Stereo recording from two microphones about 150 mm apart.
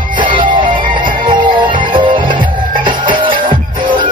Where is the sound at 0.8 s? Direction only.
30° right (ahead or behind).